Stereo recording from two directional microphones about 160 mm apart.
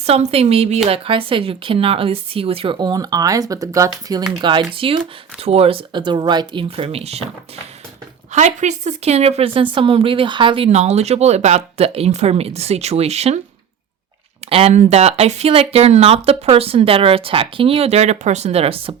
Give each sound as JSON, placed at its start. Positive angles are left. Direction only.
{"t": 0.0, "sound": "speech", "side_deg": -40}
{"t": 10.7, "sound": "speech", "side_deg": -45}
{"t": 14.5, "sound": "speech", "side_deg": -40}